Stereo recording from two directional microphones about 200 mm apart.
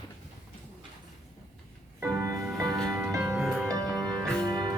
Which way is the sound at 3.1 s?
15° right (ahead or behind).